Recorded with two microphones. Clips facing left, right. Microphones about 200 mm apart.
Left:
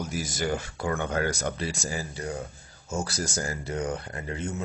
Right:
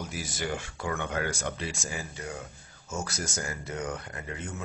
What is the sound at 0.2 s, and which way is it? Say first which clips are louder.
Speech: left 4 dB; 40° left (ahead or behind).